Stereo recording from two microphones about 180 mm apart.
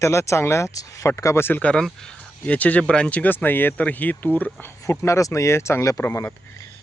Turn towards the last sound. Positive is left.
turn(degrees=15)  # may be behind; listen again after turning